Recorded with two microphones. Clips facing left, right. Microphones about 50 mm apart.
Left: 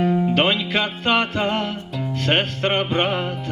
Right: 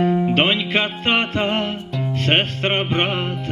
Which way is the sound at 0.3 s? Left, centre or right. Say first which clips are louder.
Right 1 dB; right.